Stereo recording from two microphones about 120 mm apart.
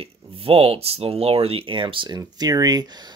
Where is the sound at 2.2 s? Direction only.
30° right (ahead or behind).